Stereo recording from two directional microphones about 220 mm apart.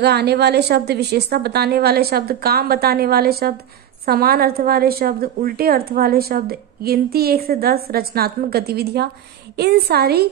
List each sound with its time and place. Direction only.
0.0 s a woman's voice: 50° right (ahead or behind)